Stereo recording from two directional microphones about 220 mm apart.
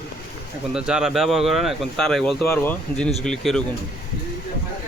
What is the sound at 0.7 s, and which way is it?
Speech, 5° right (ahead or behind).